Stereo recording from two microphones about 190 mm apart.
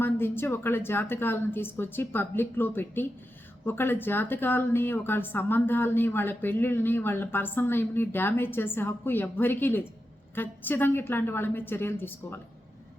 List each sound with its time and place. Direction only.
0.0 s speech: 10° left (ahead or behind)